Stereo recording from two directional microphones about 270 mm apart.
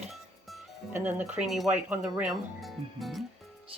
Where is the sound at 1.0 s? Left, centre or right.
Centre.